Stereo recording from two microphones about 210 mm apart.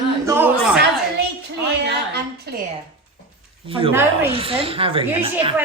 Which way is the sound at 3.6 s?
25° right (ahead or behind).